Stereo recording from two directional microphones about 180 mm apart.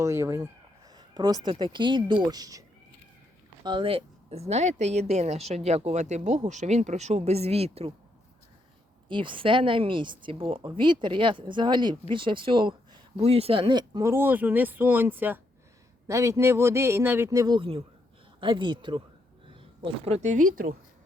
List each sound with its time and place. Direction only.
0.0 s speech: 15° right (ahead or behind); by 7.9 s 35° right (ahead or behind)
9.0 s speech: 25° right (ahead or behind); by 20.7 s 45° right (ahead or behind)